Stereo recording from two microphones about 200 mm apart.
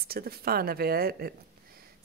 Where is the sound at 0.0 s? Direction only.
50° right (ahead or behind).